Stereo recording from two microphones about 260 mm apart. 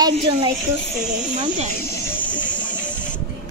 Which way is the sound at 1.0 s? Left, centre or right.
Centre.